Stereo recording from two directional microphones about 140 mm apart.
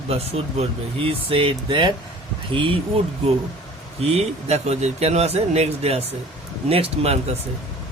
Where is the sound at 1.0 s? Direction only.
40° right (ahead or behind).